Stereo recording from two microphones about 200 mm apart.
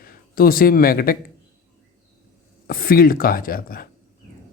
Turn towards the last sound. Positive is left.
turn(degrees=45)  # may be behind; listen again after turning